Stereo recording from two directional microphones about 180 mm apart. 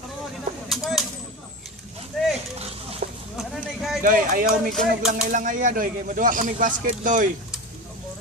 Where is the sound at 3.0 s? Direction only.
50° right (ahead or behind).